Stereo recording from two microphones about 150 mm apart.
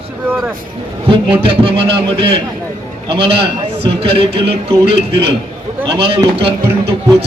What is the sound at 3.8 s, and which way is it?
A man's voice, 40° right (ahead or behind).